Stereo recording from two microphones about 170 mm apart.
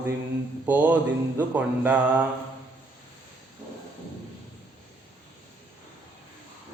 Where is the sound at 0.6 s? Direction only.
10° right (ahead or behind).